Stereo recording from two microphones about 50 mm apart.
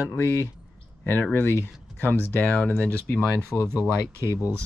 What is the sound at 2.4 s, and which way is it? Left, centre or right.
Speech, left.